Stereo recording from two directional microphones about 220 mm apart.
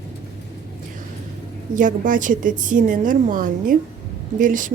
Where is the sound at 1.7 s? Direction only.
35° right (ahead or behind).